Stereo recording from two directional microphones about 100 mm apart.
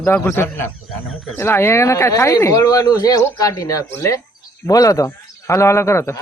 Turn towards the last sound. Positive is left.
turn(degrees=30)  # may be behind; listen again after turning